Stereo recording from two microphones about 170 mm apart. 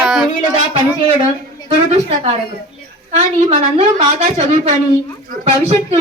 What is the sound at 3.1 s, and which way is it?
A woman's voice, 40° right (ahead or behind).